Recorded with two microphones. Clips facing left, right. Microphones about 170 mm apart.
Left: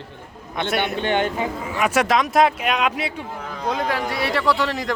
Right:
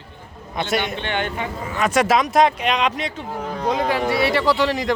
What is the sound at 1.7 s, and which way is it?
Speech, 5° left (ahead or behind).